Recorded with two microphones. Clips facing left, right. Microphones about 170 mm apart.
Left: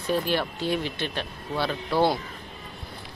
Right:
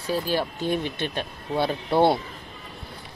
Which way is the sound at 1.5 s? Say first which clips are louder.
Right 3 dB; 25° right (ahead or behind).